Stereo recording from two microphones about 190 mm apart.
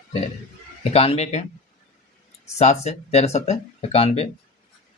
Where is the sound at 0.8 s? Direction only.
35° left (ahead or behind).